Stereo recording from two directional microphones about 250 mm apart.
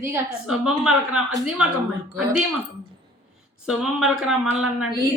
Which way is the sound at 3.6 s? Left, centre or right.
Centre.